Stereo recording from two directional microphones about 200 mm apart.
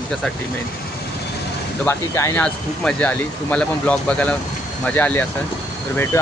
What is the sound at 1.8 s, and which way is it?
Speech, 15° left (ahead or behind).